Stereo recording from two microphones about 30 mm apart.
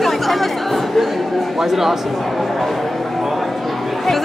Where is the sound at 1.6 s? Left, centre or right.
Centre.